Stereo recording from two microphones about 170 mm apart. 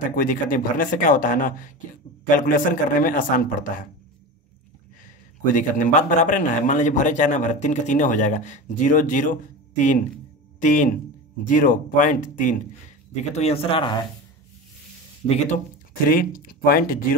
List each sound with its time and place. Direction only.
0.1 s a man's voice: 55° left (ahead or behind)
5.0 s a man's voice: 50° left (ahead or behind); by 14.0 s 30° left (ahead or behind)
15.2 s a man's voice: 40° left (ahead or behind)
16.1 s speech: 55° left (ahead or behind)